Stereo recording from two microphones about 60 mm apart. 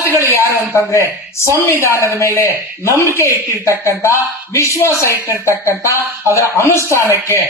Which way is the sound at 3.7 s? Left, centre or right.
Left.